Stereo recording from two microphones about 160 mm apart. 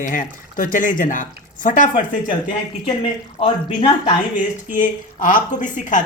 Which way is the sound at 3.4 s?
35° left (ahead or behind).